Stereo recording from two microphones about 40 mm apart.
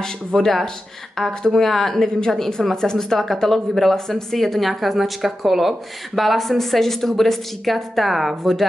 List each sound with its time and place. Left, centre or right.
0.4 s a woman's voice: centre
1.4 s a woman's voice: centre